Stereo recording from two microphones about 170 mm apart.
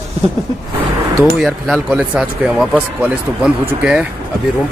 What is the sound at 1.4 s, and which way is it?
Speech, centre (ahead or behind).